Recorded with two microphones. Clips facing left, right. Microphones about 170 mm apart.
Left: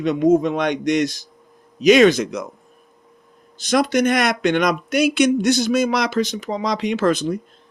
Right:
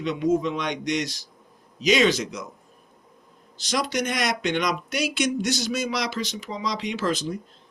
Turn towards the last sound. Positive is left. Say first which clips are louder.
# left 7 dB
turn(degrees=60)  # may be behind; listen again after turning